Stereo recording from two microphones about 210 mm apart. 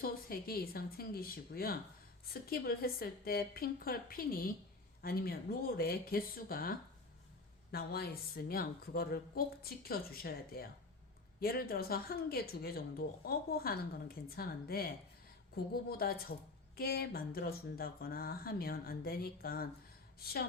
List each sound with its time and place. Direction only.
0.0 s a woman's voice: 45° left (ahead or behind)